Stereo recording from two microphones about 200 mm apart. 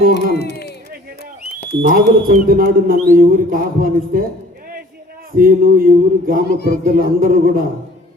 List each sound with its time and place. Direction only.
0.1 s speech: 55° left (ahead or behind)
1.8 s a man's voice: 45° right (ahead or behind)
5.4 s a man's voice: 45° right (ahead or behind)
6.5 s speech: 50° left (ahead or behind)
6.9 s a man's voice: 45° right (ahead or behind)